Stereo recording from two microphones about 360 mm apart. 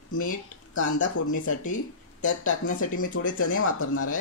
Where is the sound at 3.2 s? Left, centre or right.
Left.